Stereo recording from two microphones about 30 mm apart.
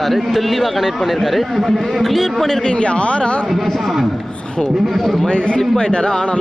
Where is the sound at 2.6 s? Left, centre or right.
Left.